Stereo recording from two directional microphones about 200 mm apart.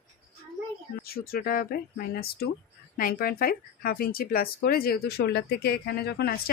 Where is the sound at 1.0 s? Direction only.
50° left (ahead or behind).